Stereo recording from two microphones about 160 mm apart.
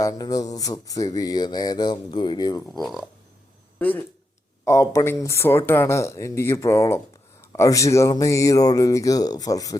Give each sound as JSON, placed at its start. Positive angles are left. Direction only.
{"t": 0.0, "sound": "speech", "side_deg": 25}
{"t": 2.8, "sound": "speech", "side_deg": 0}
{"t": 3.8, "sound": "speech", "side_deg": 10}